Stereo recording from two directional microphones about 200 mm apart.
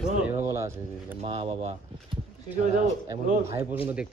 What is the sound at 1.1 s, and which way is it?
Speech, 30° right (ahead or behind).